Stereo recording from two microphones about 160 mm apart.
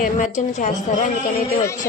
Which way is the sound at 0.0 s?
55° left (ahead or behind).